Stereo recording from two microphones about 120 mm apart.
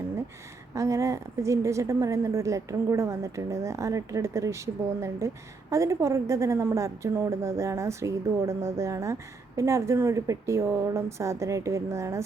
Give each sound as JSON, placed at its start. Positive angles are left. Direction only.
{"t": 0.7, "sound": "a woman's voice", "side_deg": -25}